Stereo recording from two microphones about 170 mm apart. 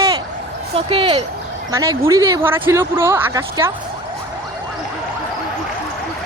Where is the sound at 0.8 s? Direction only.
30° right (ahead or behind).